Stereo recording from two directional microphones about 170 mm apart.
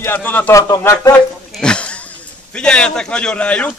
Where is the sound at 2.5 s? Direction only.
5° left (ahead or behind).